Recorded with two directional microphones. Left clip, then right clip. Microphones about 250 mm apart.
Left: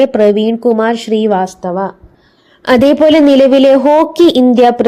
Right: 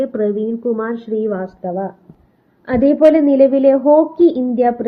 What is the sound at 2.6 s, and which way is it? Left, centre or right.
A woman's voice, left.